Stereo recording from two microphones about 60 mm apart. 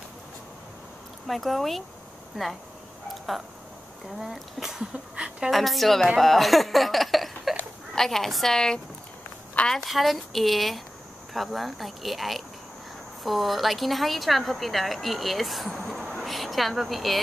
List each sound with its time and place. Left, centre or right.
1.2 s a woman's voice: centre
4.2 s speech: centre
4.9 s a woman's voice: centre
5.5 s a woman's voice: centre
9.8 s a woman's voice: centre